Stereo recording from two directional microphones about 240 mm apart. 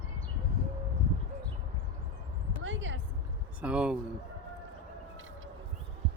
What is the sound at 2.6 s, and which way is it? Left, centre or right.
Speech, right.